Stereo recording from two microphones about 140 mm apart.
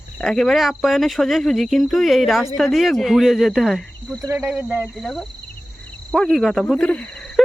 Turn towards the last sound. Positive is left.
turn(degrees=5)  # may be behind; listen again after turning